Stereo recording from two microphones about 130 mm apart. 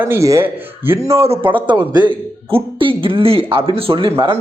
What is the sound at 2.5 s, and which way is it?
Speech, 40° right (ahead or behind).